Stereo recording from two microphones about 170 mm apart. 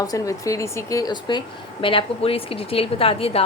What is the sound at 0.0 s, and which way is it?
A woman's voice, 20° left (ahead or behind).